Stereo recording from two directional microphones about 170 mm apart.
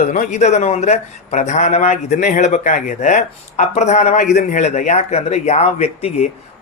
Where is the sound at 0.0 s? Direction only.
50° left (ahead or behind).